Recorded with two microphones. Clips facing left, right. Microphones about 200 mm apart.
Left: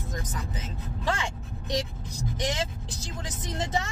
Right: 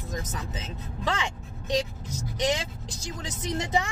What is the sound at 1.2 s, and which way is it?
A woman's voice, 15° right (ahead or behind).